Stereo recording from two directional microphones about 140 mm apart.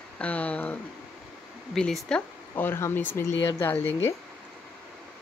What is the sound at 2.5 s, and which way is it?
Speech, 15° left (ahead or behind).